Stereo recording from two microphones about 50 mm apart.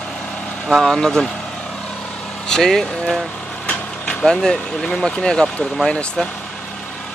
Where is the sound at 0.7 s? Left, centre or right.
Centre.